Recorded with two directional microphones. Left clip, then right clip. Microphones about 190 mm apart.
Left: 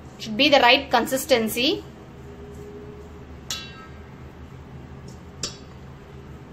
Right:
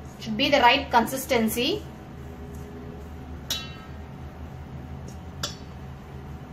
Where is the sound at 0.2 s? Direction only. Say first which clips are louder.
Left 3 dB; 35° left (ahead or behind).